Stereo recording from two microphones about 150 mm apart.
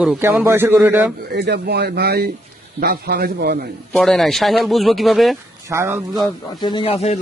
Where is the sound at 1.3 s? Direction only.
90° right.